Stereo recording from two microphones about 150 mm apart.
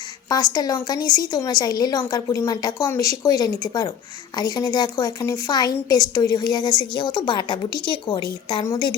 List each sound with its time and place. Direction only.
0.3 s a woman's voice: 25° left (ahead or behind)